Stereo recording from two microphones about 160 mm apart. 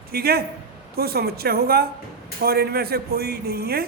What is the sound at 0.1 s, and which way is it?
Speech, 75° right (ahead or behind).